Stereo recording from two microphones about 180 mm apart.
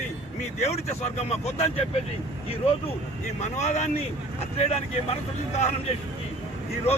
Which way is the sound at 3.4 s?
40° left (ahead or behind).